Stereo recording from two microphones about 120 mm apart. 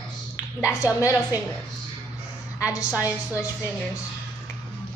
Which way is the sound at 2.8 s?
10° right (ahead or behind).